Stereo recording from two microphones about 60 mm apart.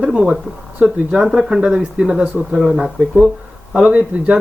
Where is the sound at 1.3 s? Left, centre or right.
Centre.